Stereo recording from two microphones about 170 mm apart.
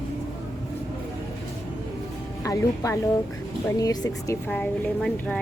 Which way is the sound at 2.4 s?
20° left (ahead or behind).